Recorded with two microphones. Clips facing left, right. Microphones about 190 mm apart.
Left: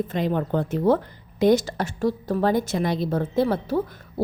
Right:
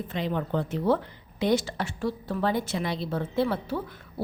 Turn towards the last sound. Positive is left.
turn(degrees=40)  # may be behind; listen again after turning